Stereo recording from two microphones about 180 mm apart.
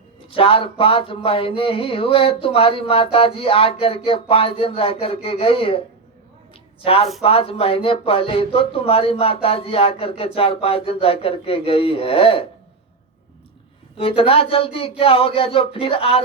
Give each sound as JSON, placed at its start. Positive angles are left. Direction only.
{"t": 0.3, "sound": "speech", "side_deg": 30}
{"t": 6.8, "sound": "speech", "side_deg": 30}
{"t": 13.9, "sound": "speech", "side_deg": 30}